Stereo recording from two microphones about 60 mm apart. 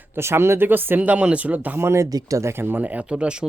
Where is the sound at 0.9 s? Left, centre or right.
Right.